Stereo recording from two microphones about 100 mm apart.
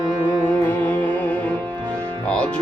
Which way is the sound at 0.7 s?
15° left (ahead or behind).